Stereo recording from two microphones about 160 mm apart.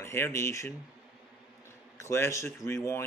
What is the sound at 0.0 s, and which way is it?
Speech, 15° left (ahead or behind).